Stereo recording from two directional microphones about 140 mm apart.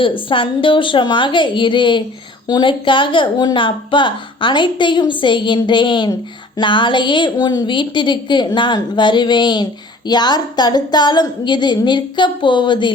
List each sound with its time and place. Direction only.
0.0 s a woman's voice: 35° left (ahead or behind)